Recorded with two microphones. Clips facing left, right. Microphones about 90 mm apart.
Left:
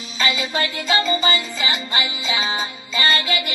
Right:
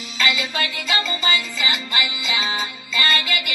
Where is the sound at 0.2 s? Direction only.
30° left (ahead or behind).